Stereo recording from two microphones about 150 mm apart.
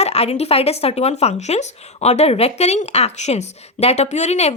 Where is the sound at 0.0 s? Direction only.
45° left (ahead or behind).